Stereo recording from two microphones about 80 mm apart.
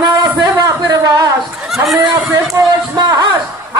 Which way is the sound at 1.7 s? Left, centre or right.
Centre.